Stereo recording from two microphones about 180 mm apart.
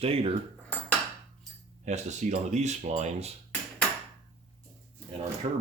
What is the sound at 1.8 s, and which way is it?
Speech, 40° right (ahead or behind).